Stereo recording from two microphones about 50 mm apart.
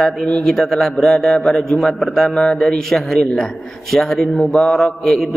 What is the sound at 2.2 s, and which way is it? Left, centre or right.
A man's voice, centre.